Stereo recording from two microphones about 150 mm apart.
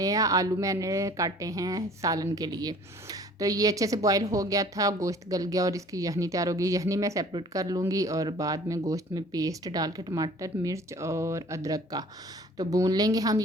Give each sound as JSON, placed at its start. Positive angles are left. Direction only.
{"t": 0.0, "sound": "speech", "side_deg": -25}